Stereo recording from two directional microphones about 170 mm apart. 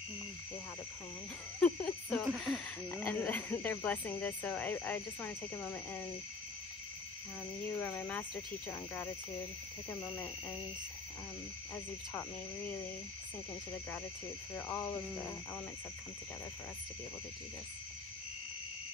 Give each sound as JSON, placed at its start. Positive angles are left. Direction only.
{"t": 1.6, "sound": "a sound", "side_deg": 5}
{"t": 2.9, "sound": "speech", "side_deg": 10}
{"t": 7.8, "sound": "speech", "side_deg": 10}
{"t": 10.0, "sound": "speech", "side_deg": 30}
{"t": 11.7, "sound": "speech", "side_deg": 10}
{"t": 14.7, "sound": "speech", "side_deg": 15}